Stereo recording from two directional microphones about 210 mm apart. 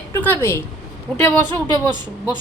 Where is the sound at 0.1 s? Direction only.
10° left (ahead or behind).